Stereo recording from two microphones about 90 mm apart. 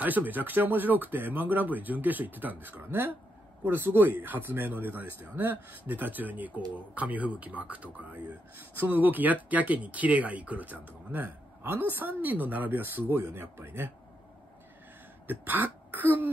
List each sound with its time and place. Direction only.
0.0 s speech: 20° right (ahead or behind)
15.2 s throat clearing: 20° right (ahead or behind)